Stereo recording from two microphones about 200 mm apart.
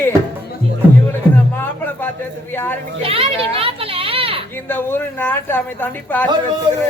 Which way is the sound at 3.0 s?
30° right (ahead or behind).